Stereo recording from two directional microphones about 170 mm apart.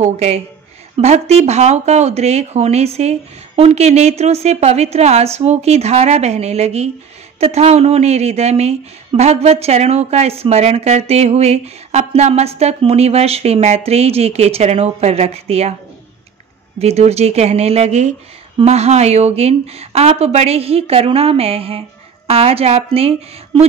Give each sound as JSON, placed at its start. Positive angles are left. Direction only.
{"t": 0.0, "sound": "speech", "side_deg": -40}
{"t": 16.7, "sound": "speech", "side_deg": -40}